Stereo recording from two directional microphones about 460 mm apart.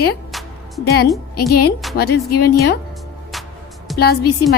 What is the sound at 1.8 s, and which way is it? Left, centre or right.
Speech, centre.